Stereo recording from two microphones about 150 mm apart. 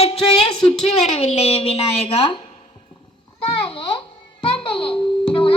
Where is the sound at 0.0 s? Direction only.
40° left (ahead or behind).